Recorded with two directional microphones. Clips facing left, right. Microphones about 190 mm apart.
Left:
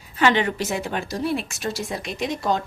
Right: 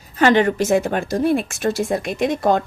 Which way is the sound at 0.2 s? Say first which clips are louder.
Right 5 dB; 45° right (ahead or behind).